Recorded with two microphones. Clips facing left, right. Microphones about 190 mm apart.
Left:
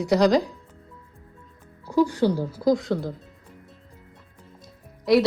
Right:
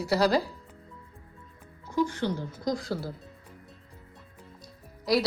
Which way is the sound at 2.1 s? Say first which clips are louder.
Left 8 dB; 35° left (ahead or behind).